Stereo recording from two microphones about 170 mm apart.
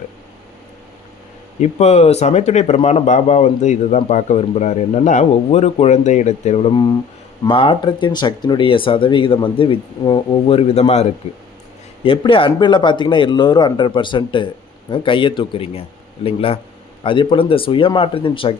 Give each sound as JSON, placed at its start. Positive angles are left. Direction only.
{"t": 1.6, "sound": "speech", "side_deg": 40}